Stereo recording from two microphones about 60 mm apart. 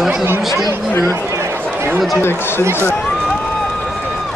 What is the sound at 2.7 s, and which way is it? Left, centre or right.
Speech, left.